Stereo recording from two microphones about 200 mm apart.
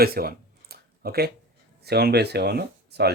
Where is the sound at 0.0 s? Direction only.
50° right (ahead or behind).